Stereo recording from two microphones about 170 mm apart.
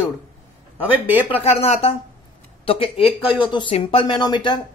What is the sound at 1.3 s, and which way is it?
Speech, 35° left (ahead or behind).